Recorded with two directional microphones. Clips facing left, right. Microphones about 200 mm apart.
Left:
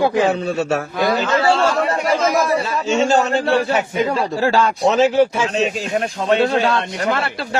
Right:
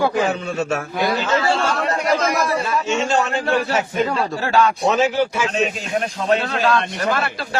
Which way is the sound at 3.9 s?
15° left (ahead or behind).